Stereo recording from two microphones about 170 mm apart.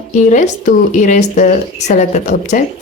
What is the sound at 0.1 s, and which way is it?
Speech, 45° left (ahead or behind).